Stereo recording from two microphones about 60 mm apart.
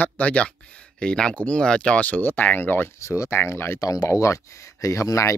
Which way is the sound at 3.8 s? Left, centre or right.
Left.